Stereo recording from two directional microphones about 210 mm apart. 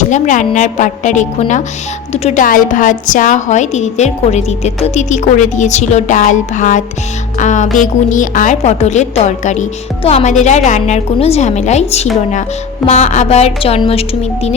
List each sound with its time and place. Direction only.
0.0 s a woman's voice: 35° left (ahead or behind)